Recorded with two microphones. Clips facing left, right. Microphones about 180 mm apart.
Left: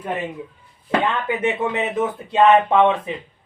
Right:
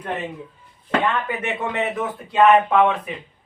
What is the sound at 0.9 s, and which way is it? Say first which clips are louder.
Speech: left 1 dB; 15° left (ahead or behind).